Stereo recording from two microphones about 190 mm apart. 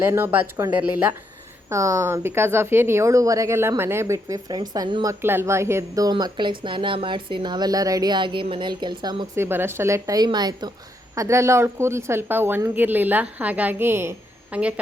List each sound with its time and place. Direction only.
0.0 s speech: 10° right (ahead or behind)